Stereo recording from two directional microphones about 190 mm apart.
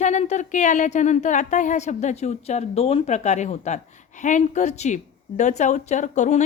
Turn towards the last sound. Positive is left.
turn(degrees=40)  # may be behind; listen again after turning